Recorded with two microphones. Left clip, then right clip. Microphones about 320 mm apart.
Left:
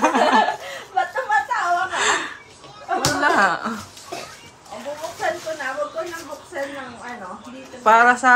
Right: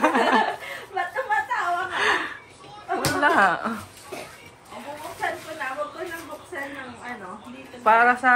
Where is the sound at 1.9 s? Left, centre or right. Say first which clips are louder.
Left 2 dB; centre.